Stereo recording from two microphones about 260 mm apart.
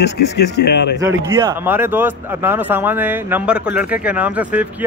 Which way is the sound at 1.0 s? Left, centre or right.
Centre.